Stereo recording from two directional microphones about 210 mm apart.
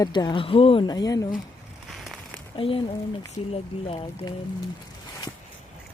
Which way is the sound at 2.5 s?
25° left (ahead or behind).